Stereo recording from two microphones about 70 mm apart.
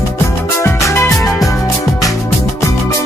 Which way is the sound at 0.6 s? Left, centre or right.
Left.